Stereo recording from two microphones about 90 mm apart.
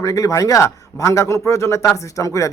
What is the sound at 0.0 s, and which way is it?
A man's voice, 40° left (ahead or behind).